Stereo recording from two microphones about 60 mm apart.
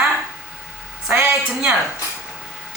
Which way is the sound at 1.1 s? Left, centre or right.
Right.